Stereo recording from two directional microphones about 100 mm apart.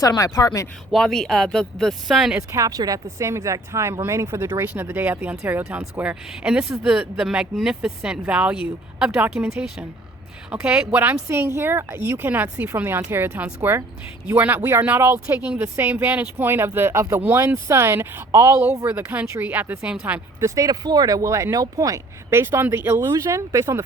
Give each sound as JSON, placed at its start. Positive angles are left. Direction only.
{"t": 0.0, "sound": "speech", "side_deg": 40}
{"t": 0.9, "sound": "speech", "side_deg": 0}
{"t": 2.5, "sound": "speech", "side_deg": -35}
{"t": 20.4, "sound": "speech", "side_deg": -35}